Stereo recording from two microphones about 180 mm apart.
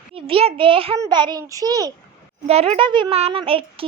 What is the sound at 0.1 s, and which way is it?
A child's voice, 30° right (ahead or behind).